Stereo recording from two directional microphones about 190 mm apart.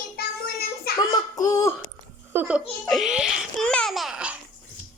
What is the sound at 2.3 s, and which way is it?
A child's voice, 10° right (ahead or behind).